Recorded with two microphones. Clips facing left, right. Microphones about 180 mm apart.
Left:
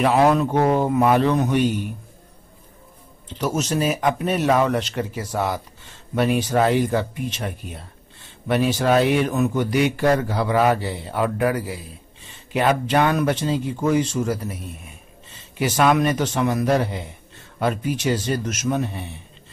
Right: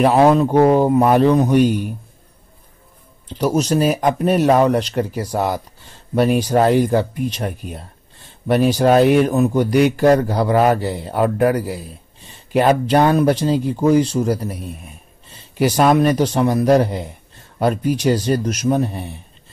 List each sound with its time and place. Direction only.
0.0 s a man's voice: 35° right (ahead or behind)
3.3 s a man's voice: 35° right (ahead or behind)
15.6 s a man's voice: 35° right (ahead or behind)